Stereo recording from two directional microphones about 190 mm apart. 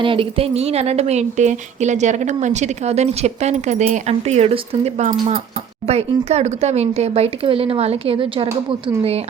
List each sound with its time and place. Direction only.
0.0 s speech: 25° right (ahead or behind)